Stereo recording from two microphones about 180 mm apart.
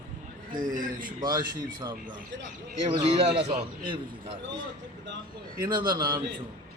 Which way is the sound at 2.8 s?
30° right (ahead or behind).